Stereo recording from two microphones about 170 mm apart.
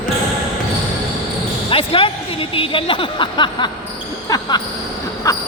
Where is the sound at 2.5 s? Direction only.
30° left (ahead or behind).